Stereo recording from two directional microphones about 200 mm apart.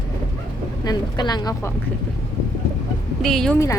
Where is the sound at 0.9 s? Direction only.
20° left (ahead or behind).